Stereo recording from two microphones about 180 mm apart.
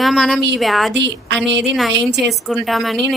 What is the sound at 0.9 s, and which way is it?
Speech, 75° right (ahead or behind).